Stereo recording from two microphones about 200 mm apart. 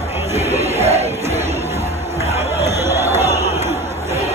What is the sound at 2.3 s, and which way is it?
Chatter, 15° right (ahead or behind).